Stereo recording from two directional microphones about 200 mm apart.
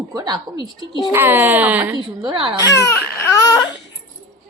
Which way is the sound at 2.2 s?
25° right (ahead or behind).